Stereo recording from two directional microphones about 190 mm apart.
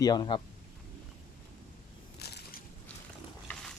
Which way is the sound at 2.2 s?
60° left (ahead or behind).